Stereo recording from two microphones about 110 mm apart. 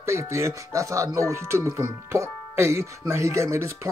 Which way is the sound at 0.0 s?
25° right (ahead or behind).